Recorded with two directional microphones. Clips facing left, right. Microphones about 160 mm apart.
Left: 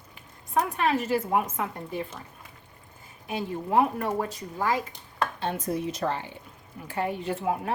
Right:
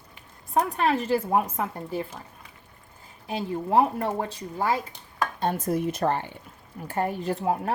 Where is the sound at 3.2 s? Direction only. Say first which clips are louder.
Right 2 dB; 30° right (ahead or behind).